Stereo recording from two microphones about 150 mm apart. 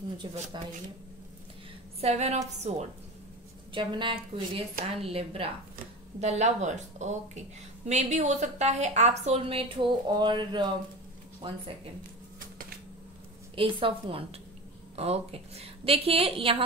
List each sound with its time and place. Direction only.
0.2 s a woman's voice: 30° right (ahead or behind)
2.0 s a woman's voice: 45° right (ahead or behind)
3.7 s a woman's voice: 35° right (ahead or behind)
13.6 s a woman's voice: 35° right (ahead or behind)